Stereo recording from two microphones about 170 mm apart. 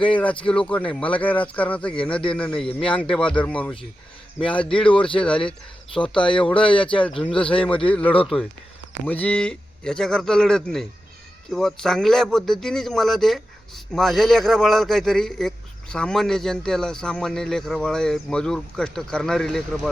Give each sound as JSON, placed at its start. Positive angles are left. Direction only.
{"t": 0.2, "sound": "speech", "side_deg": 5}
{"t": 2.6, "sound": "speech", "side_deg": 30}
{"t": 3.0, "sound": "speech", "side_deg": 5}
{"t": 4.6, "sound": "speech", "side_deg": 30}
{"t": 9.0, "sound": "speech", "side_deg": 10}